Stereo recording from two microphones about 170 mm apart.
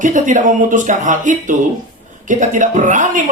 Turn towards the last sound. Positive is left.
turn(degrees=-50)  # may be behind; listen again after turning